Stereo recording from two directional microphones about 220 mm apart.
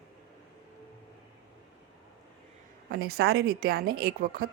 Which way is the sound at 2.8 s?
40° right (ahead or behind).